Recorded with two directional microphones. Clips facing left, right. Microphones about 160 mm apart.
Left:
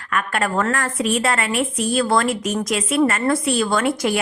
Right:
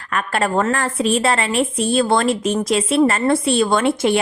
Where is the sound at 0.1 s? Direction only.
30° right (ahead or behind).